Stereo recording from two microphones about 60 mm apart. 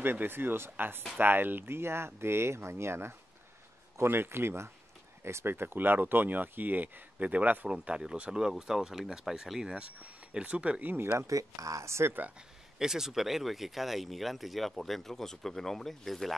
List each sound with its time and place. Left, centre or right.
0.0 s speech: right
7.7 s speech: centre
11.1 s speech: right
12.7 s speech: centre